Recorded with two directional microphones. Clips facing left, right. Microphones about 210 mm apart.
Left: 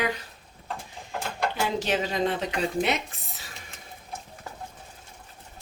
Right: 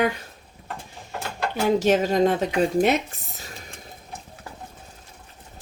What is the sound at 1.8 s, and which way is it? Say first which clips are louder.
Speech: right 10 dB; 45° right (ahead or behind).